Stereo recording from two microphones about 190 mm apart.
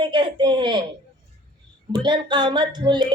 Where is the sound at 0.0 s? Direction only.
25° right (ahead or behind).